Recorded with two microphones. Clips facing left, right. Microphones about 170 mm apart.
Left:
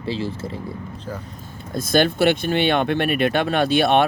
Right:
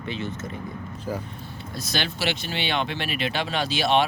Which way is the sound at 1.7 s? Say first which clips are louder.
Left 12 dB; 50° left (ahead or behind).